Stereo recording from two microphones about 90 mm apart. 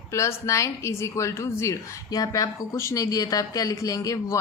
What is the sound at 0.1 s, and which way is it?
A woman's voice, 35° left (ahead or behind).